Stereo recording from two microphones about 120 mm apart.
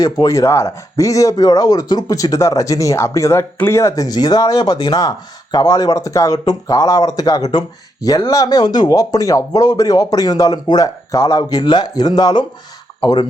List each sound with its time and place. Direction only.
0.0 s speech: 30° left (ahead or behind)